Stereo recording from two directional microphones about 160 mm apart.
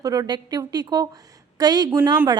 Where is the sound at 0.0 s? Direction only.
20° right (ahead or behind).